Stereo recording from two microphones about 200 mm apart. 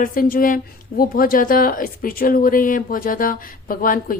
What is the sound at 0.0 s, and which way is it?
A woman's voice, 45° left (ahead or behind).